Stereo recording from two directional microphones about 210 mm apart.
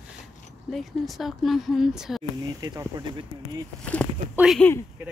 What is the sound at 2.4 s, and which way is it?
Speech, 20° right (ahead or behind).